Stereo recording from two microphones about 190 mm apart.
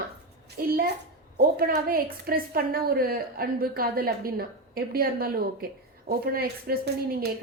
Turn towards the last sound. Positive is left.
turn(degrees=-55)  # may be behind; listen again after turning